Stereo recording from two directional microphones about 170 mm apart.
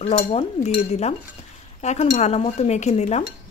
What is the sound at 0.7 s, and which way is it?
Dishes, 40° left (ahead or behind).